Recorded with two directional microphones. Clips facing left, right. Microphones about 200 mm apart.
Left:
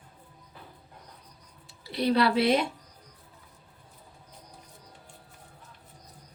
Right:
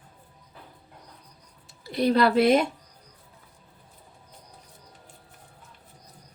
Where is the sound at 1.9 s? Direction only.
45° right (ahead or behind).